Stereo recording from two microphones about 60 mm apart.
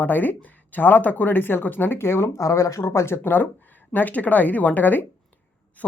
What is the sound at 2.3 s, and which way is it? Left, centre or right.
Speech, left.